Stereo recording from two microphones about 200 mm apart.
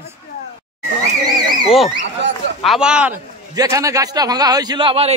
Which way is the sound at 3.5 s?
15° right (ahead or behind).